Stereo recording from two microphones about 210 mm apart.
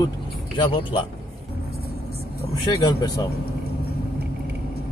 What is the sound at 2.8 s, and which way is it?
Speech, 20° left (ahead or behind).